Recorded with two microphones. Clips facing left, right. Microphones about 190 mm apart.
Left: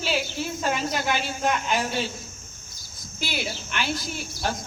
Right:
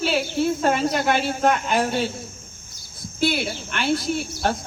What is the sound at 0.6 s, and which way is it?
A woman's voice, 60° right (ahead or behind).